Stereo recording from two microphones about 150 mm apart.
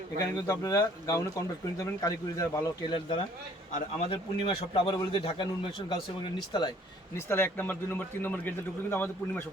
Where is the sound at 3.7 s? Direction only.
50° left (ahead or behind).